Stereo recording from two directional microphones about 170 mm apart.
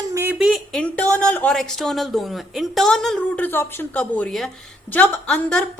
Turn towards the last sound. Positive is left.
turn(degrees=5)  # may be behind; listen again after turning